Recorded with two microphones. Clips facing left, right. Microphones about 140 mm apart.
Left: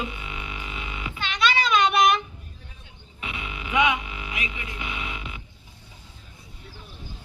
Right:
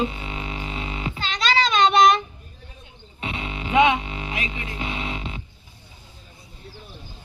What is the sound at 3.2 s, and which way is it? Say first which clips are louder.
Music: right 5 dB; 30° right (ahead or behind).